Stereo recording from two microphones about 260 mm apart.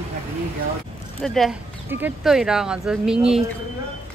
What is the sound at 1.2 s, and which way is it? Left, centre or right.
Speech, centre.